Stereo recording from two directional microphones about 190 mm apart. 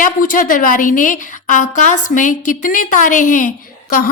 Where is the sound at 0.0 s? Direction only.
45° left (ahead or behind).